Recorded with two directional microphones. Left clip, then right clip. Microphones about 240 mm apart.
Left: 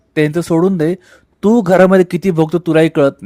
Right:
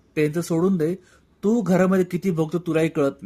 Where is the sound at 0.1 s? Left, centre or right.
Left.